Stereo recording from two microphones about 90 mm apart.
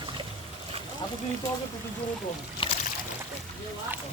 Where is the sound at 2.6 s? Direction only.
75° left (ahead or behind).